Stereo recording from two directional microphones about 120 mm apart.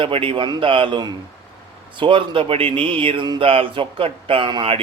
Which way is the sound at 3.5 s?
50° right (ahead or behind).